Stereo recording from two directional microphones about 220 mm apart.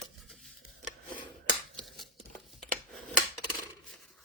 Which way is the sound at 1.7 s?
Centre (ahead or behind).